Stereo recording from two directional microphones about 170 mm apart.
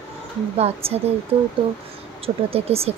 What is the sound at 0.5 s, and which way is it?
Speech, 35° right (ahead or behind).